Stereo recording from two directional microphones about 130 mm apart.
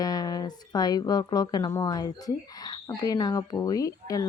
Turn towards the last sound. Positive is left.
turn(degrees=25)  # may be behind; listen again after turning